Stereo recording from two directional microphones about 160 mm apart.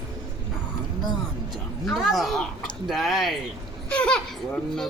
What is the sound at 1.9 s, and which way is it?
A child's voice, centre (ahead or behind).